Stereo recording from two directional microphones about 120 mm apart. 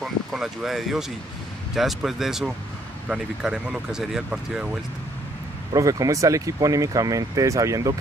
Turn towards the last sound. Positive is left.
turn(degrees=-30)  # may be behind; listen again after turning